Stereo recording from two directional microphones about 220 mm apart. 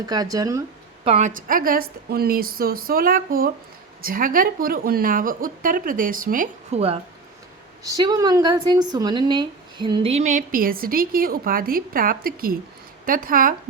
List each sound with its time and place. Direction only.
0.0 s speech: 15° right (ahead or behind)
1.0 s speech: 30° right (ahead or behind)
7.9 s speech: 15° right (ahead or behind); by 13.5 s 40° right (ahead or behind)